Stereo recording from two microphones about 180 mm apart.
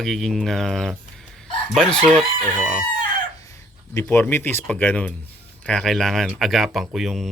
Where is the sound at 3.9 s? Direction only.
10° left (ahead or behind).